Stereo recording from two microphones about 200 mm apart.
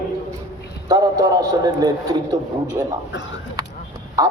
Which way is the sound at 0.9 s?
20° right (ahead or behind).